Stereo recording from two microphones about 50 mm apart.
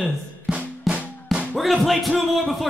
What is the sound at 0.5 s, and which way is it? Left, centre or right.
Drum, centre.